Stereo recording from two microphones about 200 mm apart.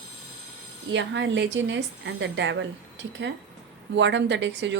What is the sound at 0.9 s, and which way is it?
A woman's voice, 65° right (ahead or behind).